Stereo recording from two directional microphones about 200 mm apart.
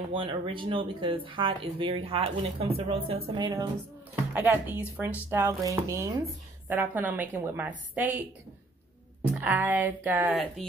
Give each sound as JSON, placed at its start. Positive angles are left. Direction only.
{"t": 0.1, "sound": "speech", "side_deg": -25}
{"t": 3.3, "sound": "speech", "side_deg": -20}
{"t": 9.3, "sound": "speech", "side_deg": -10}